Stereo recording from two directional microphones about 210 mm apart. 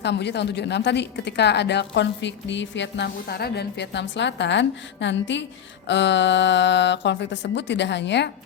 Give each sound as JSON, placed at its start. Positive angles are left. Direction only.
{"t": 0.0, "sound": "a woman's voice", "side_deg": 55}